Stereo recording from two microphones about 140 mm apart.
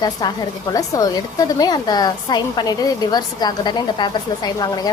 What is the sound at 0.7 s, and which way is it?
A woman's voice, 25° left (ahead or behind).